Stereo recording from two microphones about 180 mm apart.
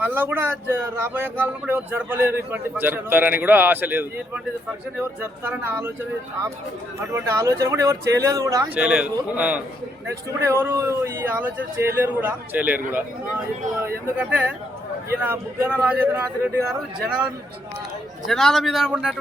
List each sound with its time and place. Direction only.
0.0 s speech: 10° right (ahead or behind)
7.0 s speech: 15° right (ahead or behind)
8.7 s speech: 5° right (ahead or behind)
18.3 s a man's voice: centre (ahead or behind)